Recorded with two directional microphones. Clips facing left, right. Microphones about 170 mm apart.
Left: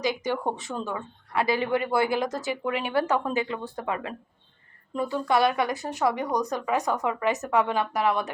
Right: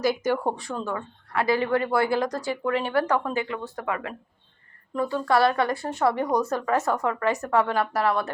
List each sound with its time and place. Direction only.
0.0 s speech: 15° left (ahead or behind)
1.3 s speech: 20° left (ahead or behind)